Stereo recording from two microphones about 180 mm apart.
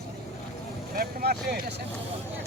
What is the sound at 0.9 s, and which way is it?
Speech, 60° right (ahead or behind).